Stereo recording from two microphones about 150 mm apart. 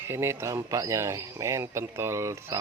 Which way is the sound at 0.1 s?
15° right (ahead or behind).